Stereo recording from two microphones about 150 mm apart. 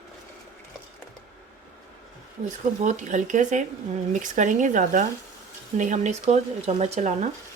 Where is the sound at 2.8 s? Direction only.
55° right (ahead or behind).